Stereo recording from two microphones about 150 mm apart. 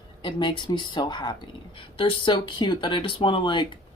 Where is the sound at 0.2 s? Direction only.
30° left (ahead or behind).